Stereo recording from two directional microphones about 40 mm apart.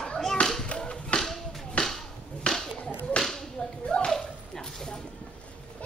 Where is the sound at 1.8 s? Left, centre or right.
Left.